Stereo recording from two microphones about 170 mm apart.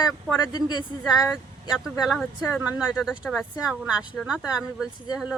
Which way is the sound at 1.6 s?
Centre (ahead or behind).